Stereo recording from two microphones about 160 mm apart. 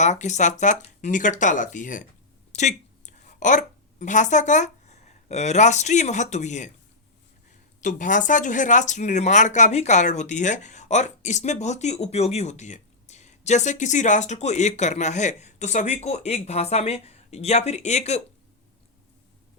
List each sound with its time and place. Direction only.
0.0 s speech: 50° left (ahead or behind)
2.5 s a sound: 45° left (ahead or behind)
4.0 s speech: 50° left (ahead or behind)
7.8 s speech: 50° left (ahead or behind)